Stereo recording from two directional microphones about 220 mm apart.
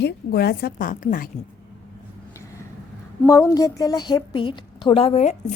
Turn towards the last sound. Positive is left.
turn(degrees=30)  # may be behind; listen again after turning